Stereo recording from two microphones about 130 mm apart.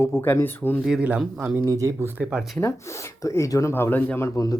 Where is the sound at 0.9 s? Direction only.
10° right (ahead or behind).